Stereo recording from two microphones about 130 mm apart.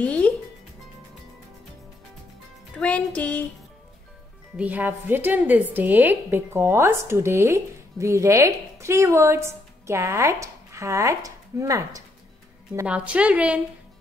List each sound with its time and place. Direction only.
0.0 s music: 10° left (ahead or behind)
2.7 s music: 10° left (ahead or behind)
4.6 s a woman's voice: 10° right (ahead or behind)
12.8 s a woman's voice: 10° right (ahead or behind)